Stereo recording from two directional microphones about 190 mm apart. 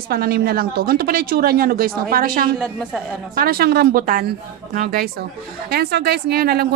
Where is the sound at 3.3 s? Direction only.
50° right (ahead or behind).